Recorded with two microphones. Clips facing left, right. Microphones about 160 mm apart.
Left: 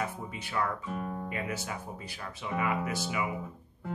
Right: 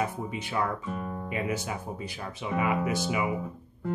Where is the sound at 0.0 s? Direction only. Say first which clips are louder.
Right 5 dB; 20° right (ahead or behind).